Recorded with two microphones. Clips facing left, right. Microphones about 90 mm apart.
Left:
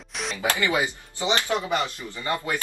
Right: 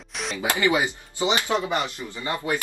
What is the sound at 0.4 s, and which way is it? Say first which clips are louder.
Speech: right 2 dB; 20° right (ahead or behind).